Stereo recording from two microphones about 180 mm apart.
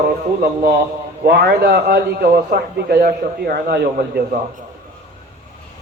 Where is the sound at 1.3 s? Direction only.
60° right (ahead or behind).